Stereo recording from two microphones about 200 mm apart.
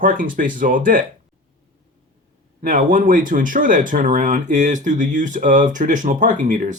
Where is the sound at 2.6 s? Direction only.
40° right (ahead or behind).